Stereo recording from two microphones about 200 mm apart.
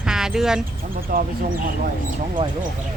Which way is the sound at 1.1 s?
45° right (ahead or behind).